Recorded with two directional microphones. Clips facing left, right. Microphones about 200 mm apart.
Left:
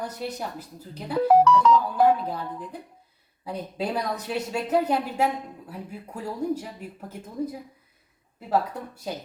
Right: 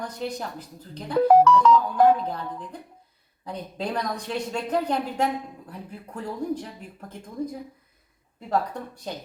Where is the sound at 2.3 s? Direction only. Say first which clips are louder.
Left 1 dB; 5° left (ahead or behind).